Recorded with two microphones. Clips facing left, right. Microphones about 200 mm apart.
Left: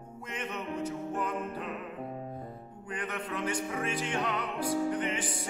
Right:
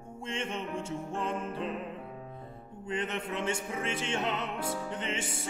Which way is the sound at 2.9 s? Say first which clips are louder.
Right 3 dB; 25° right (ahead or behind).